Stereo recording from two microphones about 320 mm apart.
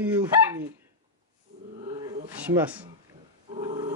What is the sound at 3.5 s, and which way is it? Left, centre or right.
Dog, centre.